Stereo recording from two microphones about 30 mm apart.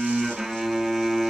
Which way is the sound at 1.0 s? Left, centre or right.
Centre.